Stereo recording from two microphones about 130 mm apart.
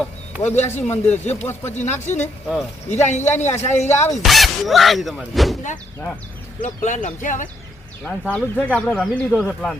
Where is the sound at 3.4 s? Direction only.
20° left (ahead or behind).